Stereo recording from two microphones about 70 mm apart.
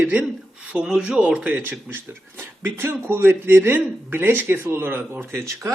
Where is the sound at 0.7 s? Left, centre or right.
Centre.